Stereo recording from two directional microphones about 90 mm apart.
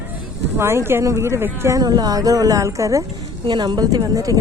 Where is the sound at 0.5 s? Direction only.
30° right (ahead or behind).